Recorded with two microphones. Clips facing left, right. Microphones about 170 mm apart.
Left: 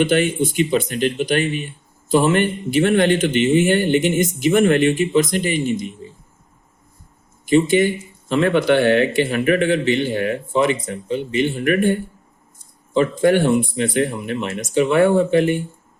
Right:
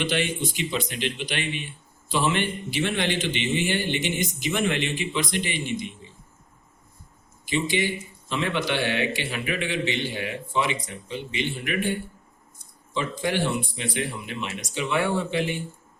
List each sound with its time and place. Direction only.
0.0 s a man's voice: 50° left (ahead or behind)
7.4 s a man's voice: 50° left (ahead or behind)